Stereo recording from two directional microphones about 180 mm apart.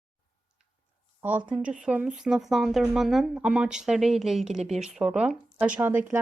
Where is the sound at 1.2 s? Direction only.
10° right (ahead or behind).